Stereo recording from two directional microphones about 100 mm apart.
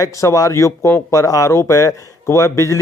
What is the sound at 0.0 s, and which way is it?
Speech, 35° left (ahead or behind).